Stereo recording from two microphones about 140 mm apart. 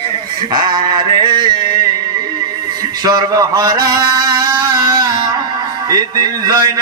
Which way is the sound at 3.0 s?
25° right (ahead or behind).